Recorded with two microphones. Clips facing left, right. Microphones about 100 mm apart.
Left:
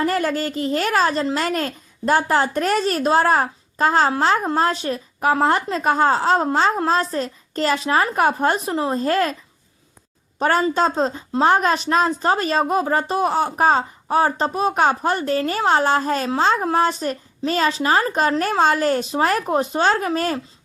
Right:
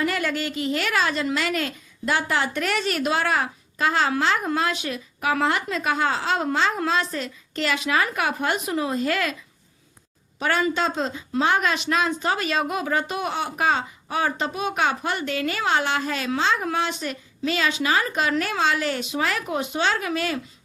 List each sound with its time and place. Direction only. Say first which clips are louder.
0.0 s a woman's voice: left 4 dB; 40° left (ahead or behind)
10.4 s a woman's voice: left 5 dB; 40° left (ahead or behind)